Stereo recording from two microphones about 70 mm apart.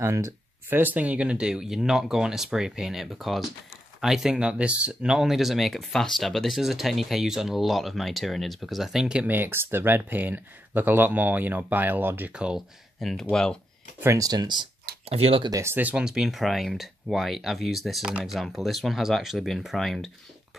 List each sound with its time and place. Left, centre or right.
0.0 s speech: right
0.7 s speech: right; by 9.2 s centre
9.2 s speech: right
12.3 s speech: centre
12.5 s speech: centre
14.2 s speech: right
15.6 s speech: right
16.0 s speech: centre